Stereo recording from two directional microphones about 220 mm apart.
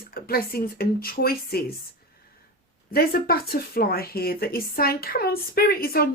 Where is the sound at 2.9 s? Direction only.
45° left (ahead or behind).